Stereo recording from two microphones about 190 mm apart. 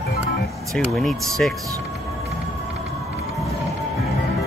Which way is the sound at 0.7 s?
Centre (ahead or behind).